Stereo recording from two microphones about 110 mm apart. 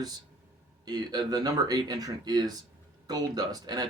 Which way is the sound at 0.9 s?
40° right (ahead or behind).